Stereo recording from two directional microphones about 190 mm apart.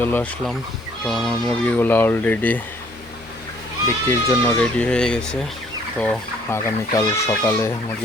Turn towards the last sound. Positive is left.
turn(degrees=15)  # may be behind; listen again after turning